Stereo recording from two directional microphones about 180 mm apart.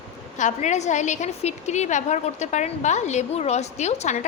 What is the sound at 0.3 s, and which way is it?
A woman's voice, 40° left (ahead or behind).